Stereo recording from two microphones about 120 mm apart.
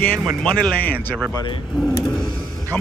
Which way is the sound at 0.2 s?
5° left (ahead or behind).